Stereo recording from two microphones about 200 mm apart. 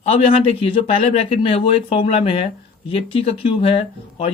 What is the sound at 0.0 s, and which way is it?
Speech, 25° left (ahead or behind).